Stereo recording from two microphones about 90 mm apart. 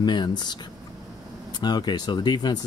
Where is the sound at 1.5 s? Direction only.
50° left (ahead or behind).